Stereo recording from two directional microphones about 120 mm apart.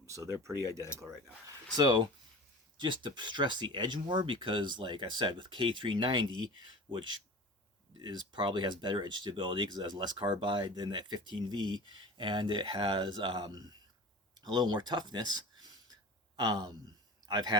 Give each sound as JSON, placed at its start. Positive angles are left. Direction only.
{"t": 0.0, "sound": "speech", "side_deg": -25}
{"t": 1.7, "sound": "speech", "side_deg": -35}
{"t": 17.2, "sound": "speech", "side_deg": -35}